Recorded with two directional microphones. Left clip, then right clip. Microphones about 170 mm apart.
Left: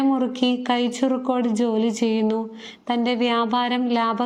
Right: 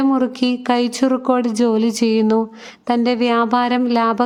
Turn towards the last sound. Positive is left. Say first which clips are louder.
# right 5 dB
turn(degrees=-30)  # may be behind; listen again after turning